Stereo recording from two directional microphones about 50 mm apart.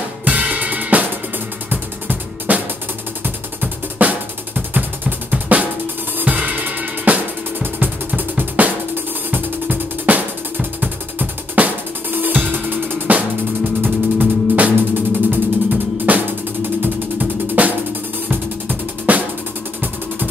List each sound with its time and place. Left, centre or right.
0.2 s drum kit: right
1.7 s music: right
3.6 s drum: right
6.1 s music: right
14.8 s music: right
16.1 s music: right